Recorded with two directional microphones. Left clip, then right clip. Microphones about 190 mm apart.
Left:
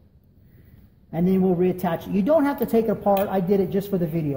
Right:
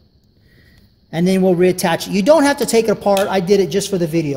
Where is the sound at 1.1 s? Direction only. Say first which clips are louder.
Right 7 dB; 50° right (ahead or behind).